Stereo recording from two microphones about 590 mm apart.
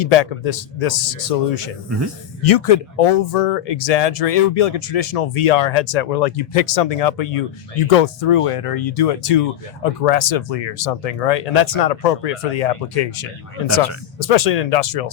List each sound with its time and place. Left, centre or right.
0.0 s speech: left
2.4 s speech: left